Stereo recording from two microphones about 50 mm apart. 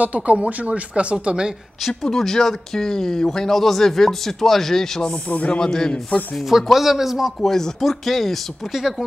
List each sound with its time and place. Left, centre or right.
0.0 s speech: right
2.0 s speech: centre
5.3 s a man's voice: left
5.6 s speech: centre
6.5 s speech: centre
7.4 s speech: centre